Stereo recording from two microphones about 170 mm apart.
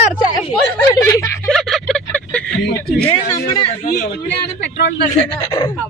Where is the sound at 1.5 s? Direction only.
Centre (ahead or behind).